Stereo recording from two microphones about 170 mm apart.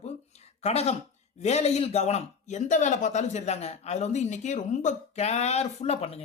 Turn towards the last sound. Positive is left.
turn(degrees=35)  # may be behind; listen again after turning